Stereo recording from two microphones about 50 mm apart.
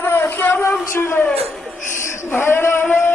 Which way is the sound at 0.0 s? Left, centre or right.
Left.